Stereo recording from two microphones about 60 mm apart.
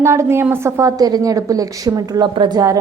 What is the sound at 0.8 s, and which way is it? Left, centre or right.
A woman's voice, right.